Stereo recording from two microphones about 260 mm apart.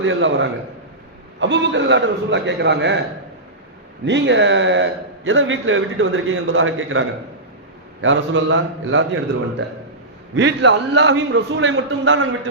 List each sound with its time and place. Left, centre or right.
0.0 s a man's voice: right
4.0 s a man's voice: right
8.0 s a man's voice: right
10.3 s a man's voice: right